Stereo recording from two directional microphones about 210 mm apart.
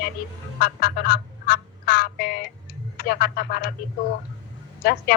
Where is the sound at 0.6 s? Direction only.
45° left (ahead or behind).